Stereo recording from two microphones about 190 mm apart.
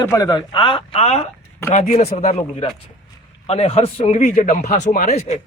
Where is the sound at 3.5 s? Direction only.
35° left (ahead or behind).